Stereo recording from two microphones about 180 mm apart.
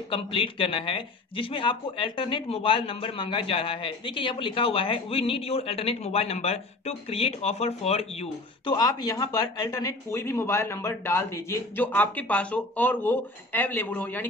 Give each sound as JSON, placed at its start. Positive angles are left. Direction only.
{"t": 0.1, "sound": "speech", "side_deg": 30}
{"t": 8.7, "sound": "speech", "side_deg": 20}